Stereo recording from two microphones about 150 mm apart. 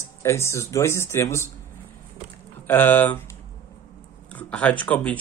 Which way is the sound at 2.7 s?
15° left (ahead or behind).